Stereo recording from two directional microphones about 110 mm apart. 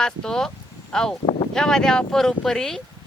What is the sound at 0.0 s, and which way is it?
Speech, 5° left (ahead or behind).